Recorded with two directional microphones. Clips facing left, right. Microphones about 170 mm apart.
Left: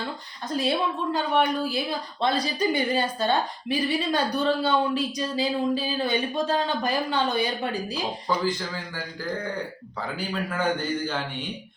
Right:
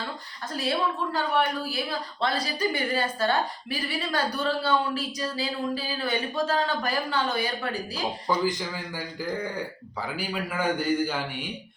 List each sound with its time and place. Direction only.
0.5 s a woman's voice: 20° left (ahead or behind)
8.3 s a man's voice: 15° right (ahead or behind)
10.2 s a man's voice: 10° right (ahead or behind)